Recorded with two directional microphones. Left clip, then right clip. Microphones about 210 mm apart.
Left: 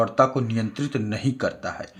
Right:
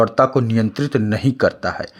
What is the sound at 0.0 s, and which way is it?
Speech, 45° right (ahead or behind).